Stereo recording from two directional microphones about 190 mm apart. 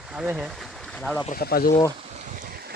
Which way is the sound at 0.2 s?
5° right (ahead or behind).